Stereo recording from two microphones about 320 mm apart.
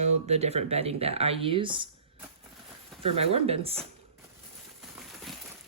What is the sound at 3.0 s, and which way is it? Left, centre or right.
Speech, centre.